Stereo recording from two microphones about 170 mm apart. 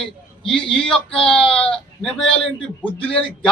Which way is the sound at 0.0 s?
5° left (ahead or behind).